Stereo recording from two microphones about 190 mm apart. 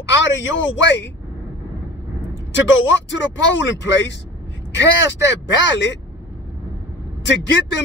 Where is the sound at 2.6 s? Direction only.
70° left (ahead or behind).